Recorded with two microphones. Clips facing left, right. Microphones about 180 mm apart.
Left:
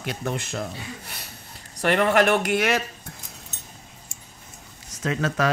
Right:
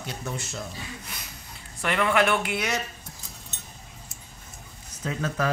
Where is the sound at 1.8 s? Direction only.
45° left (ahead or behind).